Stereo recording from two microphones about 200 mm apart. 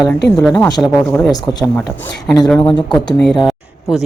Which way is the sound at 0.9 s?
10° left (ahead or behind).